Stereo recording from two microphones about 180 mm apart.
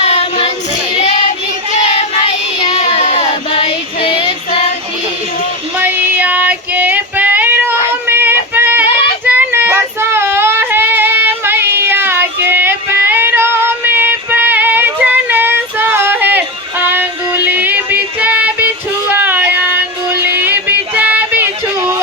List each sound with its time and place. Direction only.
0.0 s child singing: 35° left (ahead or behind)
1.9 s child singing: 35° left (ahead or behind)
5.8 s female singing: 10° right (ahead or behind)
9.2 s child singing: 10° right (ahead or behind)